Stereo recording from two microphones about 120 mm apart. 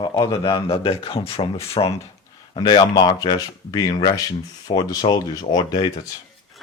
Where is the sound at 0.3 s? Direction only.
25° left (ahead or behind).